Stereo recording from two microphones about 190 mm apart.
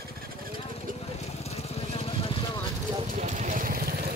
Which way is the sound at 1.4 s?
35° left (ahead or behind).